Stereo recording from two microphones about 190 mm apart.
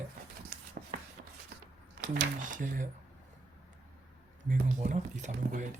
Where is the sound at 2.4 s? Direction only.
45° right (ahead or behind).